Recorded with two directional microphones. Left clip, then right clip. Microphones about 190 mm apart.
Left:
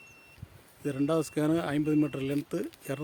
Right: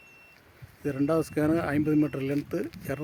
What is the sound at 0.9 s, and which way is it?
Speech, 20° right (ahead or behind).